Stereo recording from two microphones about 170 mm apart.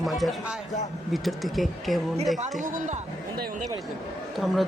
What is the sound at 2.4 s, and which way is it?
Speech, 45° right (ahead or behind).